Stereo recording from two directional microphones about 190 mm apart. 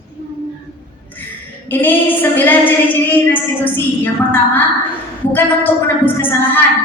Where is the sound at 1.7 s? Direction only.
10° left (ahead or behind).